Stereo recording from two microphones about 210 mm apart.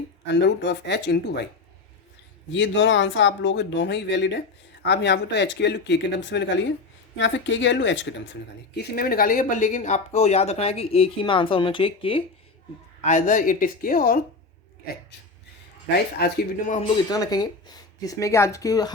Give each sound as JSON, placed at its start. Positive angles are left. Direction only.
{"t": 0.3, "sound": "speech", "side_deg": 55}
{"t": 2.5, "sound": "speech", "side_deg": 60}
{"t": 13.1, "sound": "speech", "side_deg": 35}
{"t": 16.1, "sound": "speech", "side_deg": 50}
{"t": 17.1, "sound": "speech", "side_deg": 20}